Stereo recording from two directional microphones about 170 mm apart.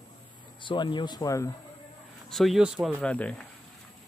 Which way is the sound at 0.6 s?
30° left (ahead or behind).